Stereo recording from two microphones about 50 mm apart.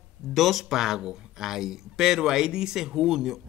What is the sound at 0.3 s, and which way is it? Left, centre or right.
Speech, centre.